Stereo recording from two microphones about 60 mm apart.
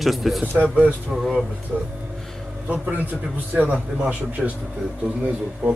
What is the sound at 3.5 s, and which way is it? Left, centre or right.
Speech, right.